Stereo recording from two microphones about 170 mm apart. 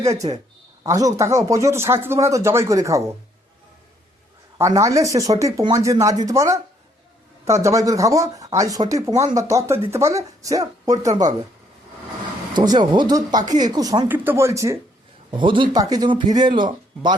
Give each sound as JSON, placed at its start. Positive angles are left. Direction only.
{"t": 0.2, "sound": "speech", "side_deg": -35}
{"t": 0.9, "sound": "speech", "side_deg": -20}
{"t": 4.5, "sound": "speech", "side_deg": -20}
{"t": 12.5, "sound": "speech", "side_deg": -25}
{"t": 15.3, "sound": "speech", "side_deg": -30}